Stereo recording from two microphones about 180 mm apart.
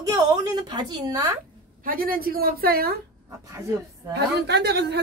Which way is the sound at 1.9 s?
55° right (ahead or behind).